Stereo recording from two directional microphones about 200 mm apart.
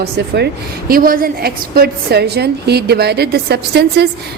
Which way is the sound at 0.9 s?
45° right (ahead or behind).